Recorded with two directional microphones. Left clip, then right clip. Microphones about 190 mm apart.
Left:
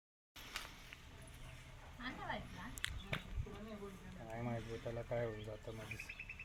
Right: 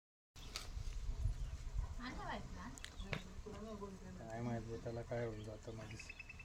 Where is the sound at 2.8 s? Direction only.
Centre (ahead or behind).